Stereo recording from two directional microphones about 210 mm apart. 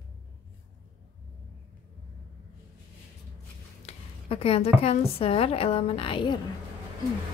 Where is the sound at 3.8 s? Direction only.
25° left (ahead or behind).